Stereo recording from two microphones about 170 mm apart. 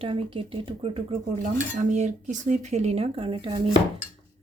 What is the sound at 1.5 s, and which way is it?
Speech, 45° right (ahead or behind).